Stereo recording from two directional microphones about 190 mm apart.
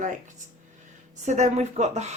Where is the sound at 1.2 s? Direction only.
35° right (ahead or behind).